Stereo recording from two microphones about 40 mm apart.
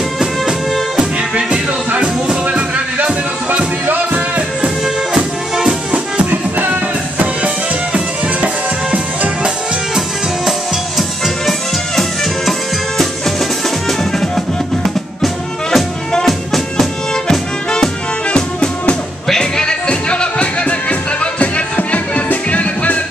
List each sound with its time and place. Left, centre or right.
0.2 s music: centre
1.3 s music: right
2.4 s music: right
3.8 s music: right
6.6 s music: right
8.9 s music: right
11.0 s music: centre
12.0 s music: centre
15.2 s music: centre
18.3 s music: left
19.9 s music: left